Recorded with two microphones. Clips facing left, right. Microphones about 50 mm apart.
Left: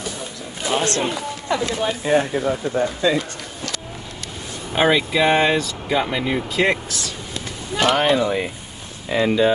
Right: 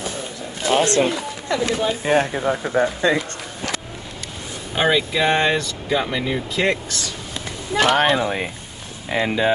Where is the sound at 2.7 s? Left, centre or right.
Right.